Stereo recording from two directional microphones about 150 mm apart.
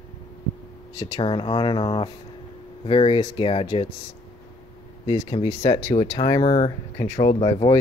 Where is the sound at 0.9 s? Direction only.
30° left (ahead or behind).